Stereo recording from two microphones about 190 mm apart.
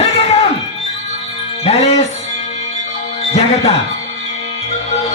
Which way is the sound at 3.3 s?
35° left (ahead or behind).